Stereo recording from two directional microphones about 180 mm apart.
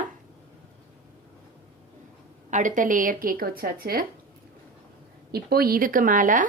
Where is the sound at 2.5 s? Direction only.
45° right (ahead or behind).